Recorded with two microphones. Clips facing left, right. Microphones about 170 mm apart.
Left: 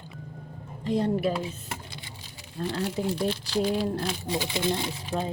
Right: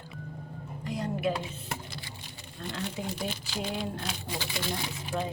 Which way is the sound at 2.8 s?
Centre (ahead or behind).